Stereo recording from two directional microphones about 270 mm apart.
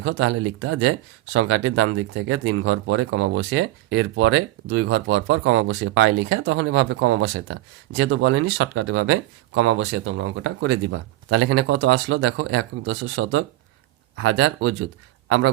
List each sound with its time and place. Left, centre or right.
0.0 s speech: right